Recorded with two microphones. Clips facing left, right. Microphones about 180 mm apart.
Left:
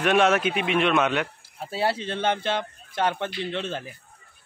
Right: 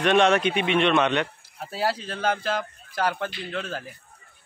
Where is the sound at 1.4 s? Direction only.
25° left (ahead or behind).